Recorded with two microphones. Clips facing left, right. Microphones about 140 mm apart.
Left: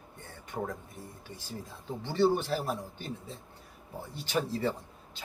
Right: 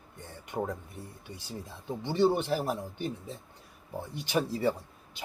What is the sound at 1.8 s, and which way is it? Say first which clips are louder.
Speech: right 1 dB; 15° right (ahead or behind).